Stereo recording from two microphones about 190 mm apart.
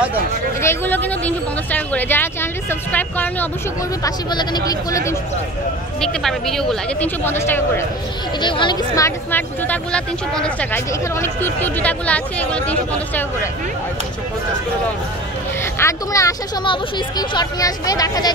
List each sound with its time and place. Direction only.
0.6 s speech: 10° left (ahead or behind)
4.0 s speech: 20° left (ahead or behind)
5.9 s speech: centre (ahead or behind)
8.4 s speech: 25° left (ahead or behind); by 13.5 s 10° left (ahead or behind)
15.8 s speech: 15° left (ahead or behind)